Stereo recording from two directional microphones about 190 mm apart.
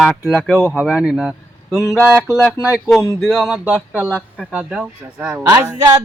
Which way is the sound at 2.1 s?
10° right (ahead or behind).